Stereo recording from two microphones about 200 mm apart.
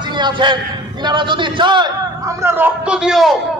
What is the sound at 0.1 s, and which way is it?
A man's voice, 25° right (ahead or behind).